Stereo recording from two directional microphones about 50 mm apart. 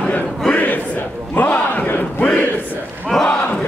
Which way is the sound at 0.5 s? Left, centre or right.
Left.